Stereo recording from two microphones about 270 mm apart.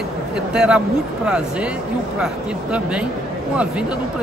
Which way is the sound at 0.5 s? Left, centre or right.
Centre.